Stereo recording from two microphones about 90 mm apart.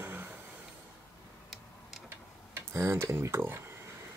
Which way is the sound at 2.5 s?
30° right (ahead or behind).